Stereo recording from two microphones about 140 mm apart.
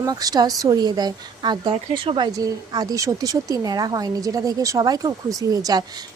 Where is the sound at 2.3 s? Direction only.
25° right (ahead or behind).